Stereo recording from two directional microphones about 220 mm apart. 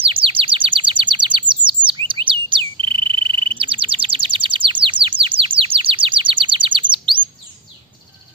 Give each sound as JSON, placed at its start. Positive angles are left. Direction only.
{"t": 0.0, "sound": "chirp", "side_deg": -25}
{"t": 1.5, "sound": "bird", "side_deg": -20}